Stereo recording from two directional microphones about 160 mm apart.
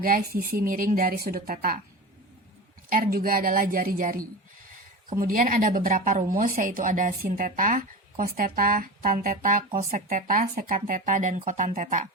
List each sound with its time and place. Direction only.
0.0 s speech: 60° right (ahead or behind)
2.9 s speech: 65° right (ahead or behind)
5.2 s speech: 60° right (ahead or behind)